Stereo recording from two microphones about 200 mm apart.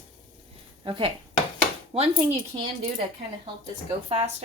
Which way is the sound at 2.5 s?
25° right (ahead or behind).